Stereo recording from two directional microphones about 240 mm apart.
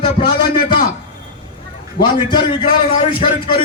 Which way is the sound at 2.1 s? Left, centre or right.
Centre.